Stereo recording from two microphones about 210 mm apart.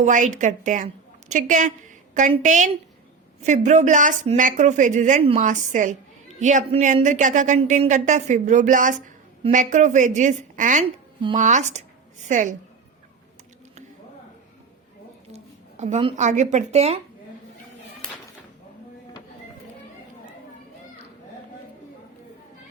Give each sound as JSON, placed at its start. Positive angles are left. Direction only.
{"t": 0.0, "sound": "a woman's voice", "side_deg": -35}
{"t": 15.8, "sound": "speech", "side_deg": -30}